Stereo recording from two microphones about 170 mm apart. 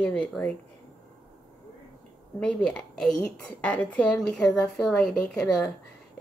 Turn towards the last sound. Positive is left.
turn(degrees=0)  # may be behind; listen again after turning